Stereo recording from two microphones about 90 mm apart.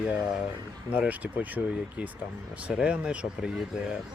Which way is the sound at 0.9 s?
15° right (ahead or behind).